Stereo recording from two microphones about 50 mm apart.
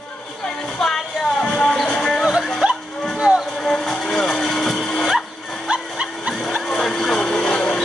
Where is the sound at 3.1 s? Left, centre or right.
Centre.